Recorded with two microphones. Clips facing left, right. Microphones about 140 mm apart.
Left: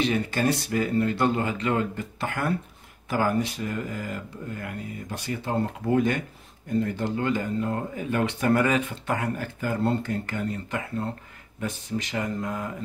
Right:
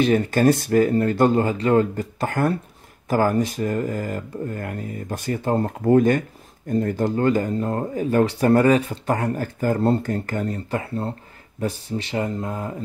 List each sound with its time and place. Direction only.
0.0 s speech: 45° right (ahead or behind); by 12.7 s 30° right (ahead or behind)